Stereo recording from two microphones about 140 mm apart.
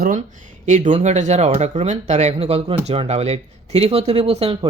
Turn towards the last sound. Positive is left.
turn(degrees=-45)  # may be behind; listen again after turning